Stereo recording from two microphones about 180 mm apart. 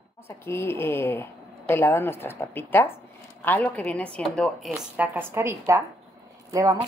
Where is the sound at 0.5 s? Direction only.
15° left (ahead or behind).